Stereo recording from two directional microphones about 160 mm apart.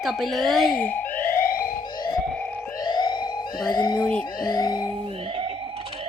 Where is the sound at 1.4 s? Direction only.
65° left (ahead or behind).